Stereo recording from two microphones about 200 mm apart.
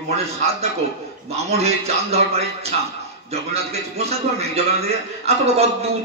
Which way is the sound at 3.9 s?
30° right (ahead or behind).